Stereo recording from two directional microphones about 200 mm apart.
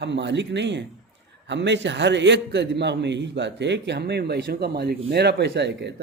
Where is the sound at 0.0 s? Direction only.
60° right (ahead or behind).